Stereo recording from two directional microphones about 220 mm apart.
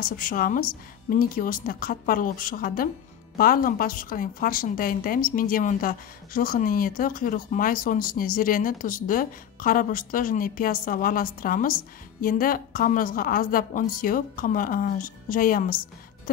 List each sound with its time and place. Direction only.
0.0 s a woman's voice: 40° left (ahead or behind)